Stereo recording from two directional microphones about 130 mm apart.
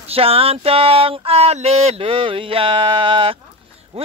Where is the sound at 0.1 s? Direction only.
50° right (ahead or behind).